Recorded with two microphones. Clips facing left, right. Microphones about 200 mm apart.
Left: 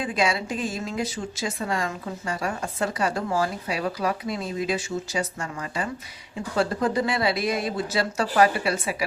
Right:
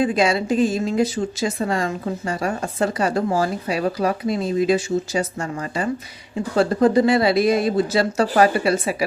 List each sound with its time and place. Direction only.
0.2 s speech: 40° right (ahead or behind)
4.3 s speech: 25° right (ahead or behind)
5.1 s speech: 40° right (ahead or behind)